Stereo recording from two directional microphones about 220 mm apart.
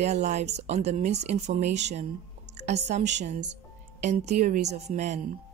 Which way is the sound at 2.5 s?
30° right (ahead or behind).